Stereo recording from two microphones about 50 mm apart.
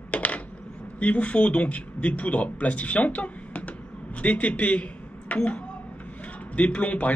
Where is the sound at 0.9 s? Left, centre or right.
Left.